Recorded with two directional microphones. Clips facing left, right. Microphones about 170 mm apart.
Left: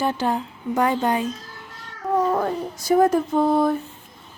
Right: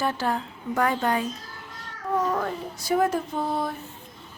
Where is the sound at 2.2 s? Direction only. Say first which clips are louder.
Left 6 dB; 30° left (ahead or behind).